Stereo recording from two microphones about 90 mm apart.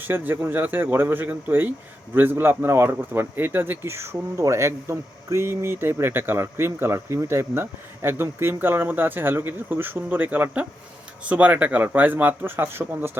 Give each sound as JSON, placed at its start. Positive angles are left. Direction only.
{"t": 0.0, "sound": "speech", "side_deg": -25}